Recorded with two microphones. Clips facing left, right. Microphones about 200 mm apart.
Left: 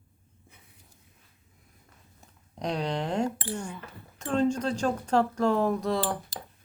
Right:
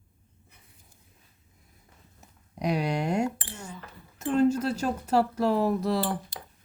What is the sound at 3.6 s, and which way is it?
Speech, 65° left (ahead or behind).